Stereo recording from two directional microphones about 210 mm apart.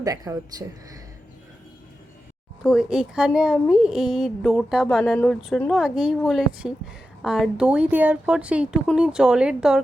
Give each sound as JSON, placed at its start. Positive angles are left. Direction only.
{"t": 0.0, "sound": "speech", "side_deg": -15}
{"t": 2.6, "sound": "a woman's voice", "side_deg": -5}